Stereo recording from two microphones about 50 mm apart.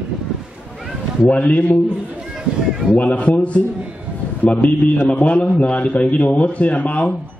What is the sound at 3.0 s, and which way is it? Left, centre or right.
Speech, left.